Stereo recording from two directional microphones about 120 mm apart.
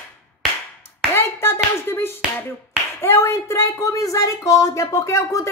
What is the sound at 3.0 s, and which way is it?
Speech, 20° left (ahead or behind).